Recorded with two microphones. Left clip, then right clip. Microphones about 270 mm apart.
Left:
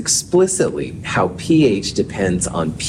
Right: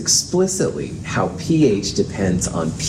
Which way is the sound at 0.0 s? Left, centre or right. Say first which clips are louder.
Left 2 dB; left.